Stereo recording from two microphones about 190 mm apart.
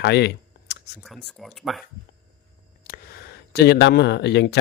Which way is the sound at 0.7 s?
60° left (ahead or behind).